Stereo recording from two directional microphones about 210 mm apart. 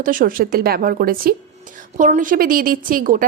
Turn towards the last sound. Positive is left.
turn(degrees=-40)  # may be behind; listen again after turning